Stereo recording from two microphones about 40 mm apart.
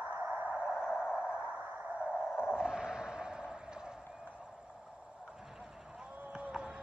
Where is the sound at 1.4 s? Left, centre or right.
Right.